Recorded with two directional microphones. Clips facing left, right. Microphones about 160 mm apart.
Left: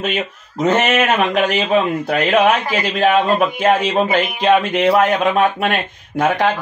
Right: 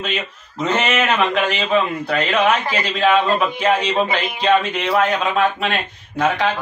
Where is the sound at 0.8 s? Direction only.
45° left (ahead or behind).